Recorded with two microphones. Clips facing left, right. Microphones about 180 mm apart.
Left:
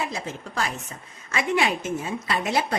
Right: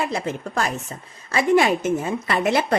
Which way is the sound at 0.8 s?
35° right (ahead or behind).